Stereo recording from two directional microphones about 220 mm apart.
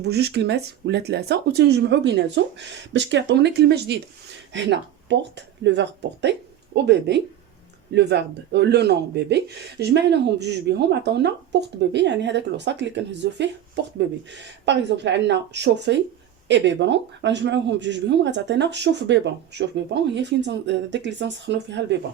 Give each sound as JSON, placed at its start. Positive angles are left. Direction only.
{"t": 0.0, "sound": "speech", "side_deg": -50}